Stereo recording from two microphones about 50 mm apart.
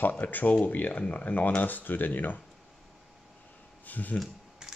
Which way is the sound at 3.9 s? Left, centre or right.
Left.